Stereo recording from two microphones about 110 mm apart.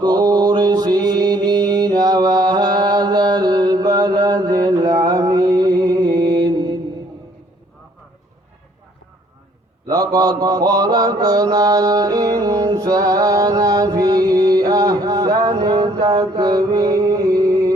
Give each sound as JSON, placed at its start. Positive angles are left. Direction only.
{"t": 0.0, "sound": "mantra", "side_deg": -40}
{"t": 9.8, "sound": "mantra", "side_deg": -35}